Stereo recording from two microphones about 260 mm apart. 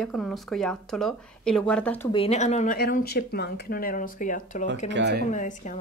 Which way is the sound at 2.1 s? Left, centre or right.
Left.